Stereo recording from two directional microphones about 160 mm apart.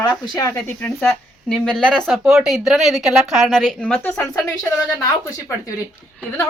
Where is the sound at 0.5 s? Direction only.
10° left (ahead or behind).